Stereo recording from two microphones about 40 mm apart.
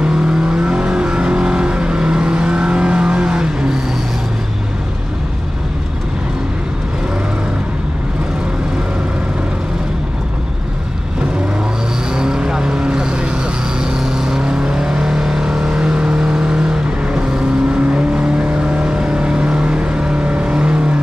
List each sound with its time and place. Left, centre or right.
0.0 s vehicle: right
12.2 s vehicle: centre